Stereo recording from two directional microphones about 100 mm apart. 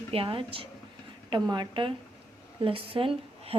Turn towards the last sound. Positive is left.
turn(degrees=-65)  # may be behind; listen again after turning